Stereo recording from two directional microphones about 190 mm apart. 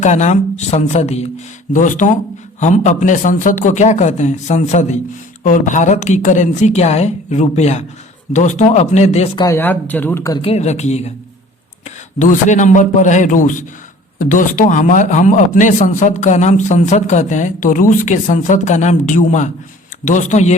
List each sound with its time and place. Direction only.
0.0 s a man's voice: 40° left (ahead or behind)
9.4 s speech: 15° left (ahead or behind)
10.4 s a man's voice: 35° left (ahead or behind)
12.2 s a man's voice: 40° left (ahead or behind)